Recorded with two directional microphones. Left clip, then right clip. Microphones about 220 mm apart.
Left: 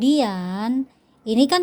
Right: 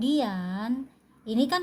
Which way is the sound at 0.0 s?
35° left (ahead or behind).